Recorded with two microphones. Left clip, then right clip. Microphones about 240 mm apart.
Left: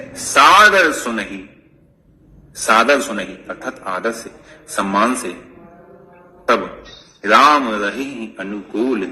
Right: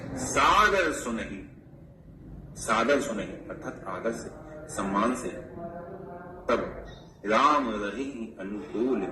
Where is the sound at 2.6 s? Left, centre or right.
Left.